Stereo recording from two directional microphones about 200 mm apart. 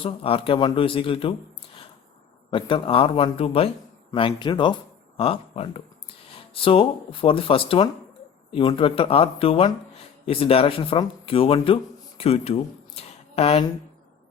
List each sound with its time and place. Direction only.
0.0 s speech: 30° left (ahead or behind)
2.5 s speech: 25° left (ahead or behind)